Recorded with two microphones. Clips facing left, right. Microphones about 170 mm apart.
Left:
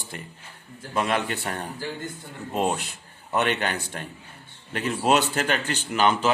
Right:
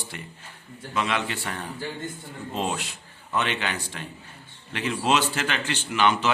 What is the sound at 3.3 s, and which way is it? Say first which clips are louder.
A man's voice: left 3 dB; 50° left (ahead or behind).